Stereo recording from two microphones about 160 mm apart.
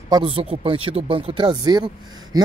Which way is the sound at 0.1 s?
35° right (ahead or behind).